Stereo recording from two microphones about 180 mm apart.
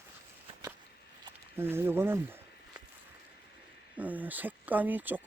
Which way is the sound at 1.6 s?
10° right (ahead or behind).